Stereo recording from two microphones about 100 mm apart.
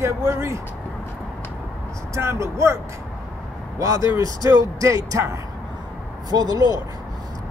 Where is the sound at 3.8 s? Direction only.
35° right (ahead or behind).